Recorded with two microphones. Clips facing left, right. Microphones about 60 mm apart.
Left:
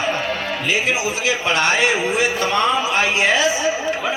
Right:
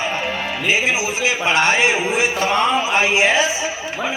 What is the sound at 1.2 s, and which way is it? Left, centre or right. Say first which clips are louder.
Speech: right 2 dB; right.